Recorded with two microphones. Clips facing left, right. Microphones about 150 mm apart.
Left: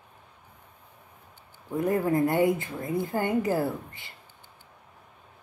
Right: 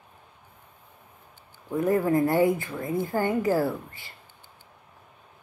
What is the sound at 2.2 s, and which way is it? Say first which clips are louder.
A woman's voice: right 1 dB; 20° left (ahead or behind).